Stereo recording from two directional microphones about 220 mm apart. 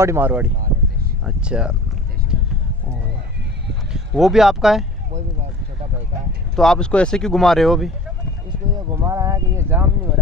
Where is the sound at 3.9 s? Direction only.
Centre (ahead or behind).